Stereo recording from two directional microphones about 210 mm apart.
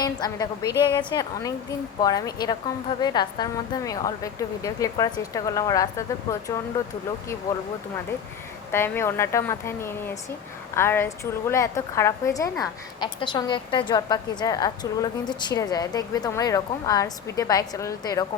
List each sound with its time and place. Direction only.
0.0 s a woman's voice: 20° left (ahead or behind)
7.5 s a woman's voice: 15° left (ahead or behind)
8.7 s a woman's voice: 10° left (ahead or behind)